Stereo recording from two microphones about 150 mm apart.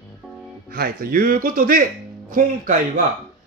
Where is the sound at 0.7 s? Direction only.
85° right.